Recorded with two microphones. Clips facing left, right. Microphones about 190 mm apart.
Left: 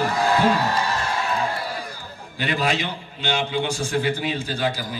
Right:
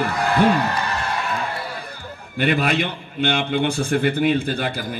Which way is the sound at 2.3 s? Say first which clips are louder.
Right 4 dB; 55° right (ahead or behind).